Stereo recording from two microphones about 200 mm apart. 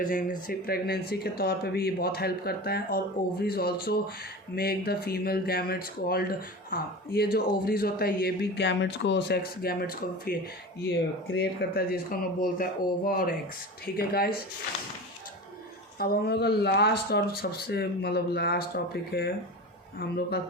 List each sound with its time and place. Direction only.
0.0 s speech: 40° left (ahead or behind)
16.0 s speech: 50° left (ahead or behind)